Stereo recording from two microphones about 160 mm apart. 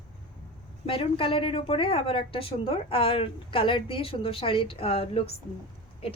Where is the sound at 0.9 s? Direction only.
35° left (ahead or behind).